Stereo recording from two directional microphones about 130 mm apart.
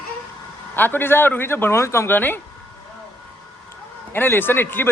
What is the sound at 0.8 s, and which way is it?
Speech, 15° left (ahead or behind).